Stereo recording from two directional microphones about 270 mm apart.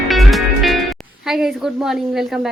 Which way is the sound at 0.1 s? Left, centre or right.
Centre.